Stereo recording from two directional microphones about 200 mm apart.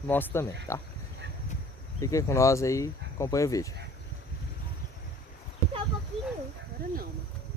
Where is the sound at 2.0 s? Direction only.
15° left (ahead or behind).